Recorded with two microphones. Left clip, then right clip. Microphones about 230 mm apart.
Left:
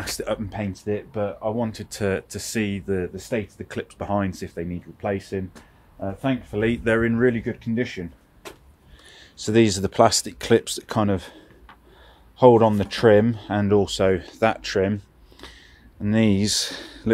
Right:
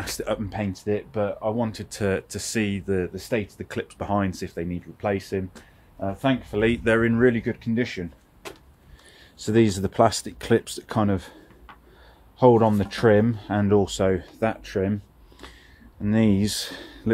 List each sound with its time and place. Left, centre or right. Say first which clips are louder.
0.0 s speech: left 1 dB; centre
9.4 s speech: left 2 dB; centre
14.1 s speech: left 4 dB; left
16.0 s speech: left 1 dB; centre